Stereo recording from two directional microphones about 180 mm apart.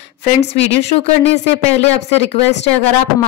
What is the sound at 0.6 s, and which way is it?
Speech, 35° left (ahead or behind).